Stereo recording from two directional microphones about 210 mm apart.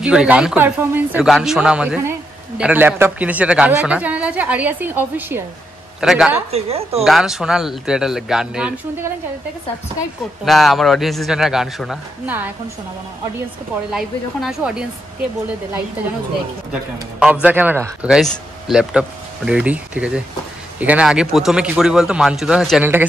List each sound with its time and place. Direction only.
0.0 s a man's voice: 5° right (ahead or behind)
6.5 s speech: 30° right (ahead or behind)
7.1 s a man's voice: centre (ahead or behind)
10.4 s a man's voice: centre (ahead or behind)
13.9 s a man's voice: centre (ahead or behind)
17.2 s a man's voice: 5° right (ahead or behind)